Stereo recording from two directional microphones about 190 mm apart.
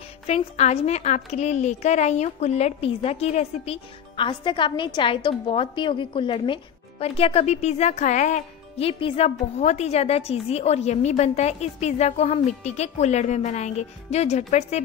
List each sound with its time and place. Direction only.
0.3 s a woman's voice: 35° left (ahead or behind)